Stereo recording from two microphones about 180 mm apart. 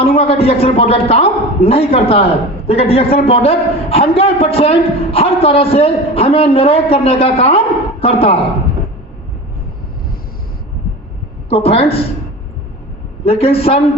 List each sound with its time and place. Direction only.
0.0 s a man's voice: 30° left (ahead or behind)
11.4 s a man's voice: 35° left (ahead or behind)
13.2 s a man's voice: 35° left (ahead or behind)